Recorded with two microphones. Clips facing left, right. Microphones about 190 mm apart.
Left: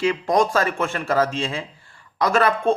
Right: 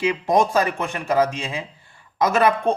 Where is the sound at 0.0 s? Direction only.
20° right (ahead or behind).